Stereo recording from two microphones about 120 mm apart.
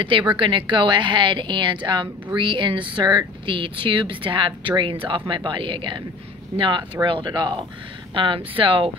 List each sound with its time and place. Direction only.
0.0 s a woman's voice: 45° right (ahead or behind)